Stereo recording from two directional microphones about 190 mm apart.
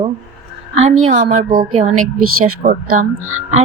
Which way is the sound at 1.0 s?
40° right (ahead or behind).